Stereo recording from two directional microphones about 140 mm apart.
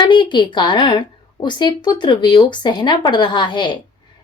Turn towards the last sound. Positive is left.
turn(degrees=35)  # may be behind; listen again after turning